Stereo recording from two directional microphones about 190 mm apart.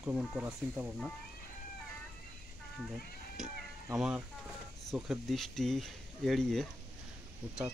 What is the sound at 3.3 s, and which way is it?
Cat, 5° right (ahead or behind).